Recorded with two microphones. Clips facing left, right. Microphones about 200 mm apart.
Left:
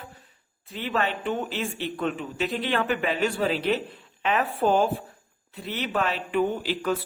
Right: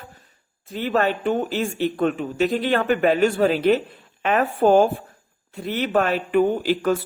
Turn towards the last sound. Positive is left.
turn(degrees=-45)  # may be behind; listen again after turning